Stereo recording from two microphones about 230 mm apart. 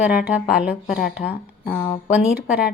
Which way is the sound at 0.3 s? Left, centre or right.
Centre.